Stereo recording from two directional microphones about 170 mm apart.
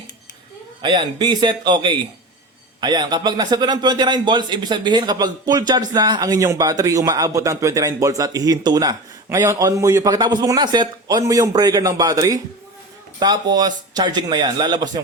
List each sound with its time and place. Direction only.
0.8 s a man's voice: 25° right (ahead or behind)